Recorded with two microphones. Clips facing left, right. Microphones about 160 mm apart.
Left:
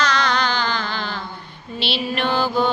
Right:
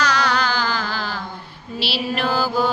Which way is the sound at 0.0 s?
10° right (ahead or behind).